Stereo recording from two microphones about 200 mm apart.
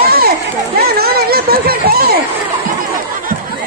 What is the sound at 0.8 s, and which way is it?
Speech, 50° right (ahead or behind).